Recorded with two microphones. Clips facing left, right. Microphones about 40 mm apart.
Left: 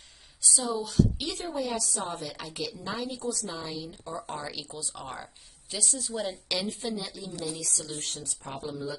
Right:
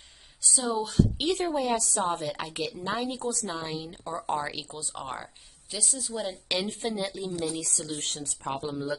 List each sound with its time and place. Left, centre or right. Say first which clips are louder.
0.4 s a sound: right 1 dB; right
0.7 s a woman's voice: even; right
2.0 s a woman's voice: right 6 dB; right
3.5 s a woman's voice: right 2 dB; right
4.2 s speech: right 9 dB; centre
4.5 s a woman's voice: right 2 dB; right
5.0 s speech: right 4 dB; centre
5.7 s a woman's voice: even; centre
6.5 s a woman's voice: right 4 dB; right